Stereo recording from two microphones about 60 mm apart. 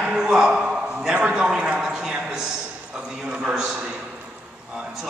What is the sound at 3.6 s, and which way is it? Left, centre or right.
Speech, centre.